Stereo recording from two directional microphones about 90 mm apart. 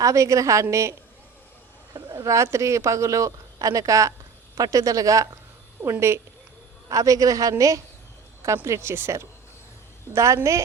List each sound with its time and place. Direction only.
0.0 s speech: 35° right (ahead or behind)
2.1 s speech: 35° right (ahead or behind)